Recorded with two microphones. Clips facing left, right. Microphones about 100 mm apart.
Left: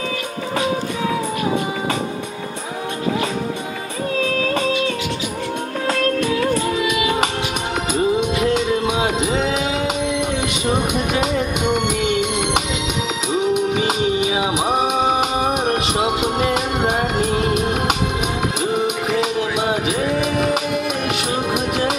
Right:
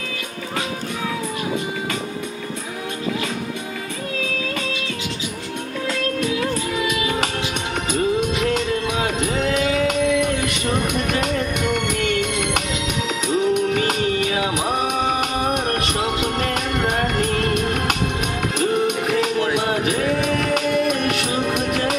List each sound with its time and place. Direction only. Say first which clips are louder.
6.9 s music: left 3 dB; 20° left (ahead or behind)